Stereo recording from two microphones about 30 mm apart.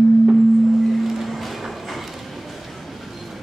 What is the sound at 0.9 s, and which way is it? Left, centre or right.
Music, centre.